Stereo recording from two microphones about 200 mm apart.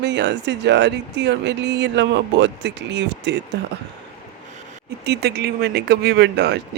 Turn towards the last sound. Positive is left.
turn(degrees=-55)  # may be behind; listen again after turning